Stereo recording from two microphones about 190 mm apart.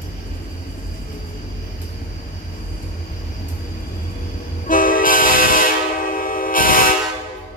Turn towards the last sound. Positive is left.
turn(degrees=45)  # may be behind; listen again after turning